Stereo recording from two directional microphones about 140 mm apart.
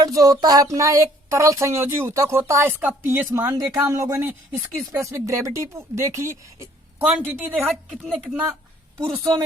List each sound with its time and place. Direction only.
0.0 s speech: 25° right (ahead or behind)
7.0 s speech: 10° right (ahead or behind)
8.0 s speech: centre (ahead or behind)
9.1 s speech: 40° right (ahead or behind)